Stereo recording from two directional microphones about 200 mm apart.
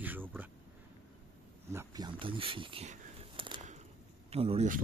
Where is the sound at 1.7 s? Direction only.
20° right (ahead or behind).